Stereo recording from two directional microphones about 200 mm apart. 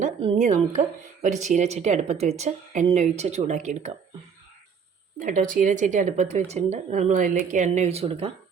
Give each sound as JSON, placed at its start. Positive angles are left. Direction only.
{"t": 0.0, "sound": "a woman's voice", "side_deg": -30}
{"t": 5.2, "sound": "a woman's voice", "side_deg": -40}